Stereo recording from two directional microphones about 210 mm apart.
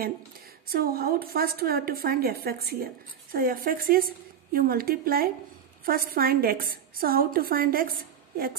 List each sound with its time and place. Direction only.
0.7 s a woman's voice: 45° right (ahead or behind)